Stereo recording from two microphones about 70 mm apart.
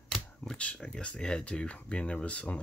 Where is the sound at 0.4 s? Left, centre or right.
Centre.